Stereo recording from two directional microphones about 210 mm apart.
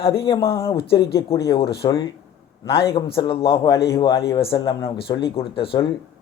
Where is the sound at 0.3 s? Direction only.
15° left (ahead or behind).